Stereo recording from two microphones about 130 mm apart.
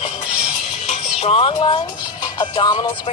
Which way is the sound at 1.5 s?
40° left (ahead or behind).